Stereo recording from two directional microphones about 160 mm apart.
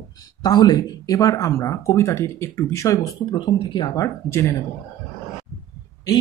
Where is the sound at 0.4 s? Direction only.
25° left (ahead or behind).